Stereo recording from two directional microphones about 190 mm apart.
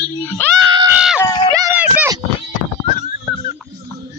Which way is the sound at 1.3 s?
25° left (ahead or behind).